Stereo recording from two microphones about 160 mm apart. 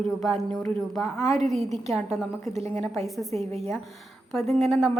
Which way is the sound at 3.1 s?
Centre (ahead or behind).